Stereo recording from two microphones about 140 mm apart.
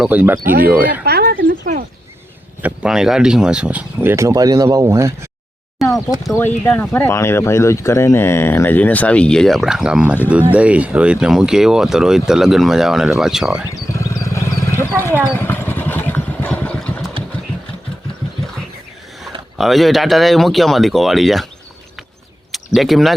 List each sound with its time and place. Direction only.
0.0 s speech: 10° right (ahead or behind)
1.1 s speech: 90° right
2.6 s speech: 10° right (ahead or behind)
5.8 s a sound: centre (ahead or behind)
6.3 s speech: 15° left (ahead or behind); by 13.7 s 5° right (ahead or behind)
13.9 s vehicle: 20° left (ahead or behind)
14.9 s speech: 15° left (ahead or behind)
15.4 s vehicle: 15° left (ahead or behind)
19.5 s speech: centre (ahead or behind)
22.5 s speech: centre (ahead or behind)